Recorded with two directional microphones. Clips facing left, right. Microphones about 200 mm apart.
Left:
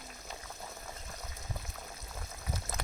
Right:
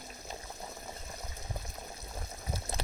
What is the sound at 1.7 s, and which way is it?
Pour, 25° right (ahead or behind).